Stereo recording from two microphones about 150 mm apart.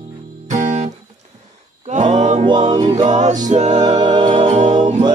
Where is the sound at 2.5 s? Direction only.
30° right (ahead or behind).